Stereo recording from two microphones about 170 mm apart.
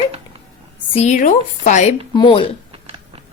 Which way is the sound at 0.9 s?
40° left (ahead or behind).